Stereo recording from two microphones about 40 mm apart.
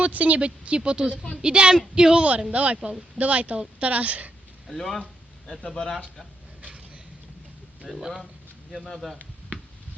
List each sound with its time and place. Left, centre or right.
0.0 s a woman's voice: right
2.5 s speech: right
4.7 s speech: centre
6.6 s a sound: right
7.9 s speech: centre